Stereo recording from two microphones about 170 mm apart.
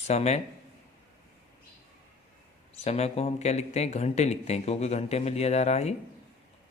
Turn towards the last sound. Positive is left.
turn(degrees=40)  # may be behind; listen again after turning